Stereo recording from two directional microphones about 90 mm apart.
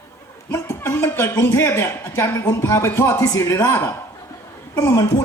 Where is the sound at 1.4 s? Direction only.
30° left (ahead or behind).